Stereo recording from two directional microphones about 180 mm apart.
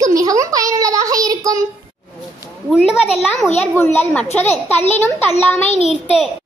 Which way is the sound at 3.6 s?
15° left (ahead or behind).